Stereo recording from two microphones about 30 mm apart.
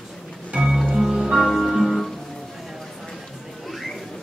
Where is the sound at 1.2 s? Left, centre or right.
Centre.